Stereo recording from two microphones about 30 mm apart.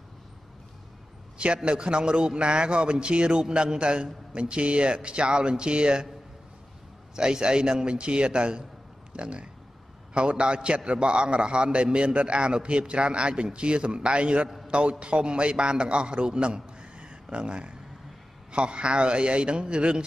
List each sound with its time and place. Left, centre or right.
1.4 s a man's voice: right
7.2 s a man's voice: right
16.7 s a sound: right
18.5 s a man's voice: right